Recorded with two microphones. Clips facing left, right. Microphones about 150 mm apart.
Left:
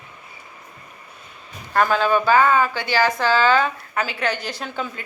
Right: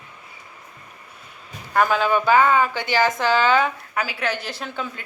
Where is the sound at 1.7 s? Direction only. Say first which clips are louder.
Left 1 dB; 10° right (ahead or behind).